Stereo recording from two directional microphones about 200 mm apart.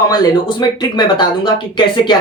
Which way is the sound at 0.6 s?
20° left (ahead or behind).